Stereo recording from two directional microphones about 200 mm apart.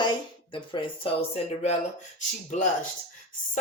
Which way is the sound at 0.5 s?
25° left (ahead or behind).